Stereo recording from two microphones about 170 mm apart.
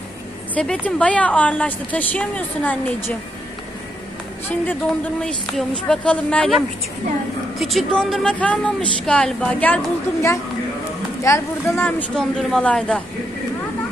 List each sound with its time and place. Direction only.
0.6 s speech: 5° left (ahead or behind)
5.2 s speech: 5° left (ahead or behind)
12.2 s speech: 5° left (ahead or behind)